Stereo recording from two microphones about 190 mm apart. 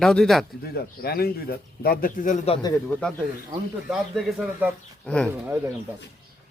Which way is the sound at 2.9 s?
5° left (ahead or behind).